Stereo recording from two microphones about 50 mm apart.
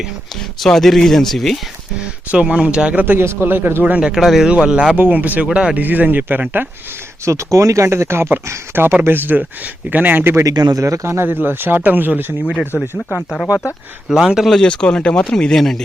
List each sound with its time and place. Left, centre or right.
0.6 s speech: centre
2.3 s speech: right
3.2 s speech: right
4.1 s speech: centre
4.4 s speech: right
4.9 s speech: right
7.3 s speech: right
8.4 s speech: right
10.3 s a man's voice: right
11.3 s speech: right
14.1 s speech: centre
14.6 s speech: centre